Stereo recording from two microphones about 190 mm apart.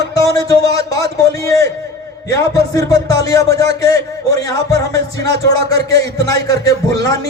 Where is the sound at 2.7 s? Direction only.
20° left (ahead or behind).